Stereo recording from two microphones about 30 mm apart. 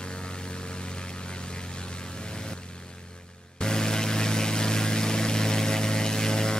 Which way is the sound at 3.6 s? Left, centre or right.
Left.